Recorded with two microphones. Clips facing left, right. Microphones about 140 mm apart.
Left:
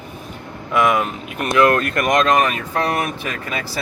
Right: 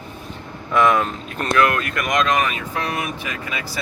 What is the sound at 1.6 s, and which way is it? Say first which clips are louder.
Speech: left 5 dB; 45° left (ahead or behind).